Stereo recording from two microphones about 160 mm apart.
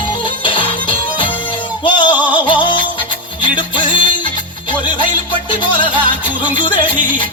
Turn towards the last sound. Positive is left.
turn(degrees=30)  # may be behind; listen again after turning